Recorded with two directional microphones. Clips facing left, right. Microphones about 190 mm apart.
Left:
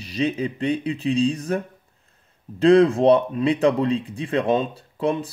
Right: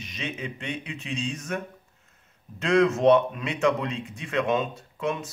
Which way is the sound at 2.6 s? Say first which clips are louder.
Left 6 dB; 30° left (ahead or behind).